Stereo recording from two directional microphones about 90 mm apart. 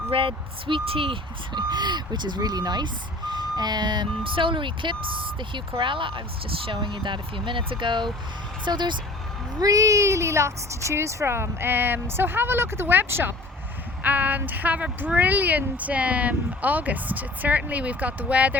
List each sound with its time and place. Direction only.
0.1 s speech: 80° right; by 9.0 s 60° right (ahead or behind)
9.6 s speech: 40° right (ahead or behind); by 18.5 s 15° right (ahead or behind)